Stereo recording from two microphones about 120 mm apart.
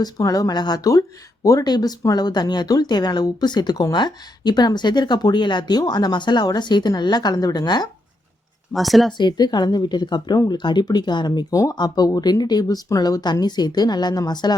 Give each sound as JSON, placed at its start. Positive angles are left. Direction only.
{"t": 0.0, "sound": "speech", "side_deg": 30}
{"t": 8.7, "sound": "speech", "side_deg": 0}
{"t": 9.1, "sound": "speech", "side_deg": 40}